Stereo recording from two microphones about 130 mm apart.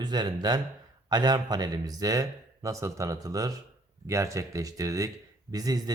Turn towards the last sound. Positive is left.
turn(degrees=-30)  # may be behind; listen again after turning